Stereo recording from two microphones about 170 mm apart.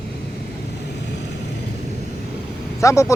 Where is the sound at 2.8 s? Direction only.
15° left (ahead or behind).